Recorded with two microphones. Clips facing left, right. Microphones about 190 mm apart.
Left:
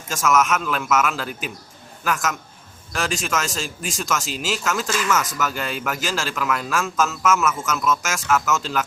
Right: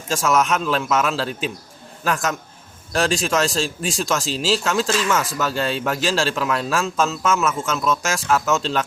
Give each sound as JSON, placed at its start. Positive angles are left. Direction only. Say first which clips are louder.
{"t": 0.1, "sound": "speech", "louder": "right 1 dB", "side_deg": -30}